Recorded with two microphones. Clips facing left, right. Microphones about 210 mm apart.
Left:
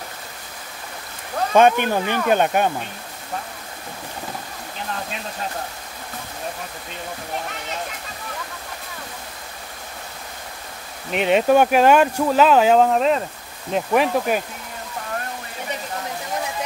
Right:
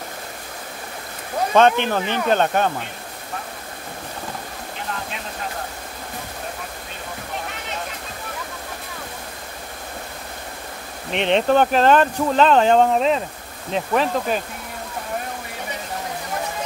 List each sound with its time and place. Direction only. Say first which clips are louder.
1.5 s speech: left 1 dB; 10° left (ahead or behind)
11.1 s speech: left 1 dB; 5° left (ahead or behind)